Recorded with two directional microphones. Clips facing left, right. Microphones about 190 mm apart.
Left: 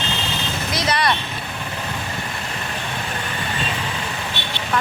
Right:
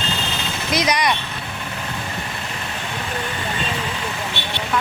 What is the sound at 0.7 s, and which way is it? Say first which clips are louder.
Speech: right 2 dB; 15° right (ahead or behind).